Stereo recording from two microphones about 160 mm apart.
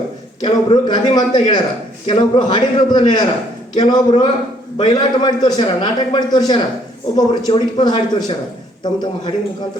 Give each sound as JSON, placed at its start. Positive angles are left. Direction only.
{"t": 0.4, "sound": "a man's voice", "side_deg": 30}